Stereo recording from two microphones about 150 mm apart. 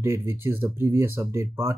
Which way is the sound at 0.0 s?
20° right (ahead or behind).